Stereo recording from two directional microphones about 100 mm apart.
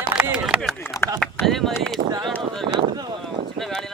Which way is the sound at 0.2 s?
10° right (ahead or behind).